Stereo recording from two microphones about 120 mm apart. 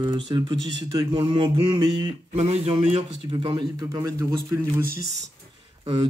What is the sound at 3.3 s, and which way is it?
Speech, 40° right (ahead or behind).